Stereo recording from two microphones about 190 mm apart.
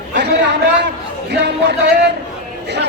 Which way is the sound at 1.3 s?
65° right (ahead or behind).